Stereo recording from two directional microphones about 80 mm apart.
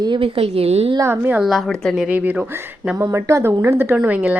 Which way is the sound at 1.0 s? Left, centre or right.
Right.